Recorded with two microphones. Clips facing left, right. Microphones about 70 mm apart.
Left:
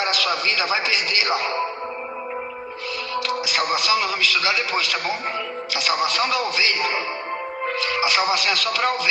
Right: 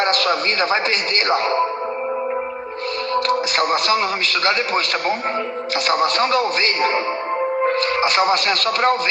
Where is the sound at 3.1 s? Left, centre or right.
Right.